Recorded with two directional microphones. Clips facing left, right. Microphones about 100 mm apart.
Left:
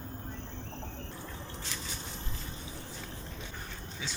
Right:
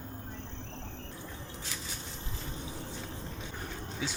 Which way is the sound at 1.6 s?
5° right (ahead or behind).